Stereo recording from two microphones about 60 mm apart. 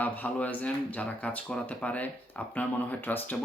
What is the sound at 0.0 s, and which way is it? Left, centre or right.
Speech, left.